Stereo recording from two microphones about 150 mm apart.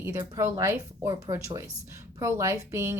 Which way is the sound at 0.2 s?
25° right (ahead or behind).